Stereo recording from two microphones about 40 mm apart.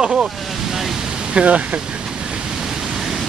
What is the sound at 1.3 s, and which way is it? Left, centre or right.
Speech, right.